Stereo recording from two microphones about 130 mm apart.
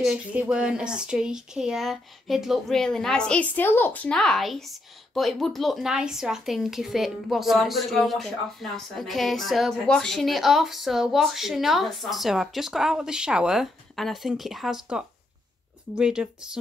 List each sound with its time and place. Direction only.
0.0 s speech: 10° right (ahead or behind)